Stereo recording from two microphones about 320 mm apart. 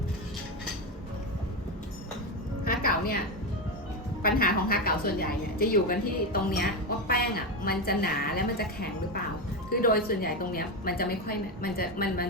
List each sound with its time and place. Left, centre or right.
2.6 s music: left
4.2 s a woman's voice: left